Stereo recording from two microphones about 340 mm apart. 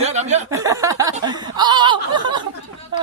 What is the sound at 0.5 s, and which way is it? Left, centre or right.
Snicker, centre.